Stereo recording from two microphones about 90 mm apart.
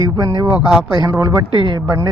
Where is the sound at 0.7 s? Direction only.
5° right (ahead or behind).